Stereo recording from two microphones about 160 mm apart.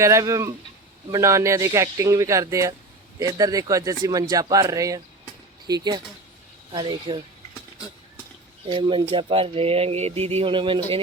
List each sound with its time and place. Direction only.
0.0 s speech: 20° right (ahead or behind)
8.6 s speech: 30° right (ahead or behind)